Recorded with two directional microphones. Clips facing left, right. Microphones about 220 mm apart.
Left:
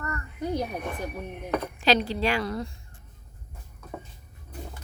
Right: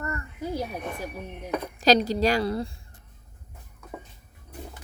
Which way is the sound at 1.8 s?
40° right (ahead or behind).